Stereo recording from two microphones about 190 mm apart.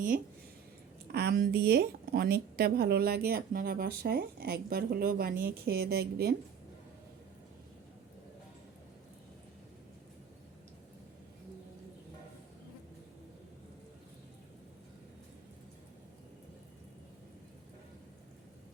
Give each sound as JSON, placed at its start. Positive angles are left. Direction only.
{"t": 1.1, "sound": "a woman's voice", "side_deg": -55}